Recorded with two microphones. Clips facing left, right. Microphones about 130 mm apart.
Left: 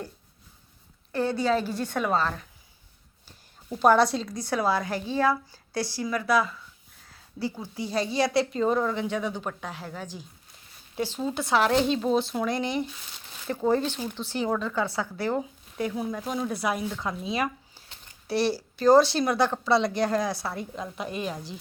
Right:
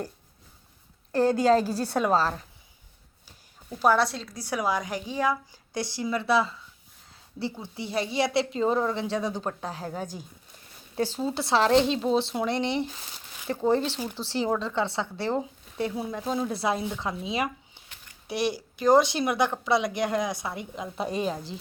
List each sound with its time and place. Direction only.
1.1 s a woman's voice: 40° right (ahead or behind)
3.8 s a woman's voice: centre (ahead or behind); by 6.5 s 30° right (ahead or behind)
7.1 s a sound: 25° right (ahead or behind)
7.6 s a woman's voice: 20° right (ahead or behind)
21.0 s a woman's voice: 35° right (ahead or behind)